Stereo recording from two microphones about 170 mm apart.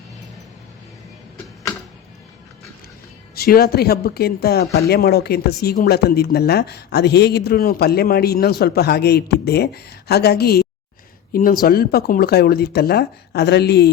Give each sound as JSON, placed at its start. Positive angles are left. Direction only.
{"t": 3.3, "sound": "speech", "side_deg": 65}
{"t": 11.3, "sound": "speech", "side_deg": 55}